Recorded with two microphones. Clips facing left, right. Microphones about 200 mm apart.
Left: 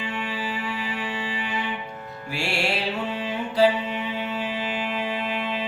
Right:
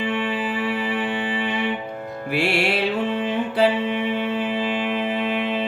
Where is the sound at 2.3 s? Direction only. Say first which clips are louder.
Right 7 dB; 55° right (ahead or behind).